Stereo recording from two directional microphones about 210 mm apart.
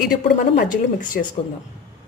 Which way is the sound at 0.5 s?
40° left (ahead or behind).